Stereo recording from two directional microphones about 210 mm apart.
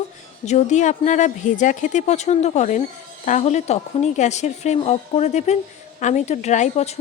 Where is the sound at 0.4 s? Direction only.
35° left (ahead or behind).